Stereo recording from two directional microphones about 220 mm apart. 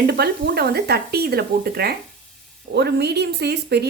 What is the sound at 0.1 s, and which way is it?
Speech, 45° right (ahead or behind).